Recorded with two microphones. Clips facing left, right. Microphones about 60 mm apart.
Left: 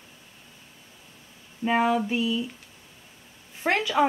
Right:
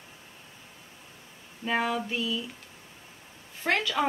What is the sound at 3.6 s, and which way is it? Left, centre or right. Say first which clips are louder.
Speech: left 3 dB; centre.